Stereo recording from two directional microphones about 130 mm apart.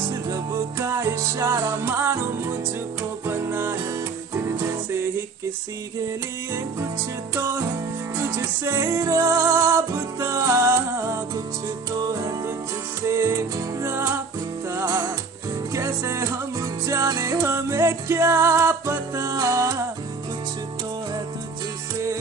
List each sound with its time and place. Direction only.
0.1 s music: 25° right (ahead or behind)
8.2 s music: 20° right (ahead or behind)